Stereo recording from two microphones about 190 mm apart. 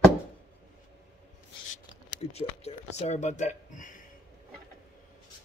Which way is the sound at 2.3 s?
35° left (ahead or behind).